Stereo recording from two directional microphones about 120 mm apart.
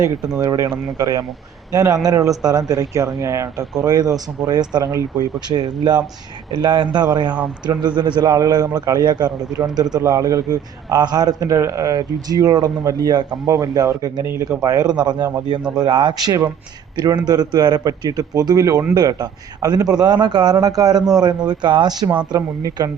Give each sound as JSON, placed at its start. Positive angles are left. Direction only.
{"t": 0.3, "sound": "a man's voice", "side_deg": -30}
{"t": 22.4, "sound": "speech", "side_deg": -30}